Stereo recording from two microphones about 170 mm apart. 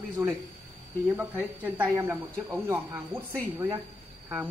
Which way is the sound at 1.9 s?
15° right (ahead or behind).